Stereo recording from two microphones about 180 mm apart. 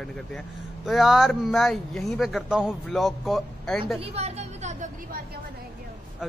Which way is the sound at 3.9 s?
35° right (ahead or behind).